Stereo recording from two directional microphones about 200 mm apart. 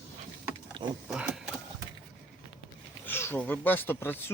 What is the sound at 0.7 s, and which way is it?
Wild animals, 20° right (ahead or behind).